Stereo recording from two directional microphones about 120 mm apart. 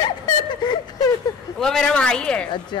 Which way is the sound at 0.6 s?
40° left (ahead or behind).